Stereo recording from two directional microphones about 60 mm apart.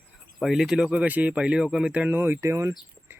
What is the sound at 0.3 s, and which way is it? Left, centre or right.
Speech, centre.